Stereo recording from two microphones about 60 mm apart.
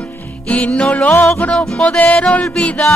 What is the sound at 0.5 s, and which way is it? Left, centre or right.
Music, left.